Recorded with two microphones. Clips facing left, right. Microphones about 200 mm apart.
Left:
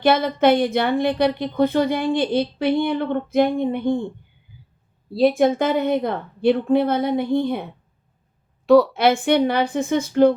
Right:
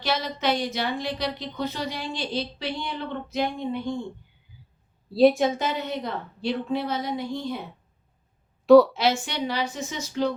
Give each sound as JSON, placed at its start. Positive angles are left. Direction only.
{"t": 0.0, "sound": "a woman's voice", "side_deg": 55}
{"t": 5.1, "sound": "a woman's voice", "side_deg": 0}
{"t": 5.4, "sound": "a woman's voice", "side_deg": 55}
{"t": 8.6, "sound": "a woman's voice", "side_deg": 0}
{"t": 9.0, "sound": "a woman's voice", "side_deg": 55}